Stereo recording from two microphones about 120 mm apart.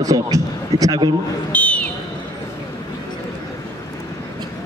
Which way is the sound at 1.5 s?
10° left (ahead or behind).